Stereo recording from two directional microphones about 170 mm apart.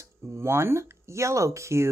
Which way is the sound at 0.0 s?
15° right (ahead or behind).